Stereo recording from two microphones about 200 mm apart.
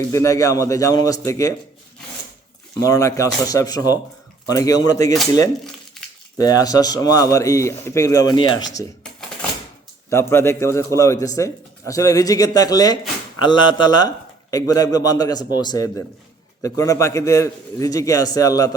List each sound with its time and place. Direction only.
0.1 s a man's voice: 15° left (ahead or behind)
2.8 s a man's voice: 15° left (ahead or behind)
6.3 s a man's voice: 20° left (ahead or behind)
10.1 s a man's voice: 15° left (ahead or behind)